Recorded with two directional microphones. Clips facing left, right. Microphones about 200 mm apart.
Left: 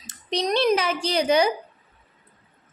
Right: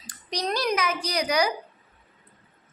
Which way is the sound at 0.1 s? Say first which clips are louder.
Left 5 dB; 25° left (ahead or behind).